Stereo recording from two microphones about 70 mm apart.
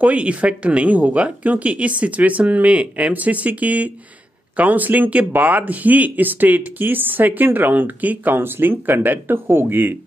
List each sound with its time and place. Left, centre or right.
0.0 s speech: centre